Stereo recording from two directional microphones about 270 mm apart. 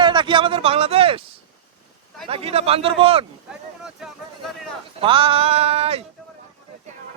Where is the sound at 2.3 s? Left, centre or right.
Right.